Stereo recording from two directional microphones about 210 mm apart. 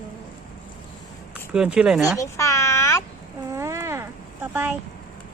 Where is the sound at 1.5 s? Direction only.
5° right (ahead or behind).